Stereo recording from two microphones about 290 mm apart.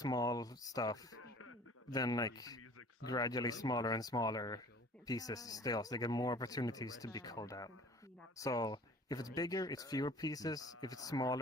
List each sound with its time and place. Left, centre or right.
0.0 s speech: centre
1.2 s a sound: left
1.9 s speech: centre